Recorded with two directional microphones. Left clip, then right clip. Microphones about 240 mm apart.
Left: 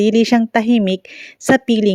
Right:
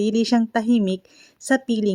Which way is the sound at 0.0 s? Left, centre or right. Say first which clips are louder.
Left 7 dB; left.